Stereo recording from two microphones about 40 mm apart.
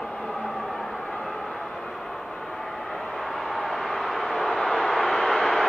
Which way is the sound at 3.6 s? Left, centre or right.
Centre.